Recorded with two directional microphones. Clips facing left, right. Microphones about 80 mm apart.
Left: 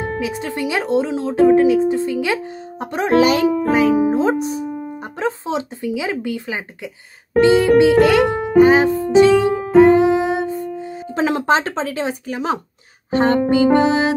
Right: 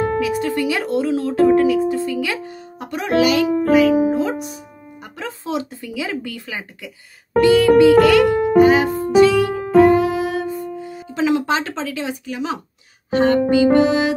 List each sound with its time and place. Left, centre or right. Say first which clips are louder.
0.0 s speech: right 4 dB; left
7.3 s music: even; left
11.1 s speech: left 1 dB; left